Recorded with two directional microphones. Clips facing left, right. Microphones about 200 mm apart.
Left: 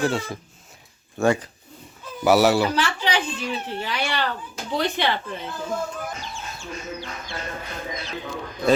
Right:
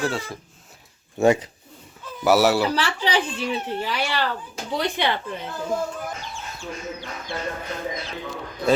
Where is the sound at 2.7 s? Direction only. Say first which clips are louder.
Even; 35° right (ahead or behind).